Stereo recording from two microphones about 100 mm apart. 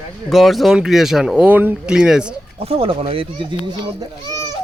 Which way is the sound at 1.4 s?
15° right (ahead or behind).